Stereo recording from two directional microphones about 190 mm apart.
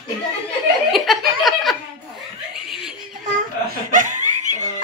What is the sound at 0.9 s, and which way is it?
Speech, centre (ahead or behind).